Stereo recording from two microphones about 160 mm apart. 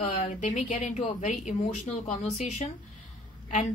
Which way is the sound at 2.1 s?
45° left (ahead or behind).